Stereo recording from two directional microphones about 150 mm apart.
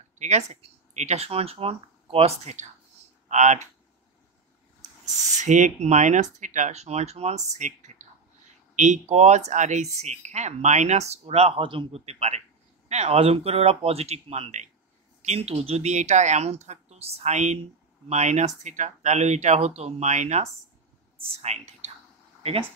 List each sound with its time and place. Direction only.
0.2 s speech: 50° right (ahead or behind)
5.4 s speech: 50° right (ahead or behind)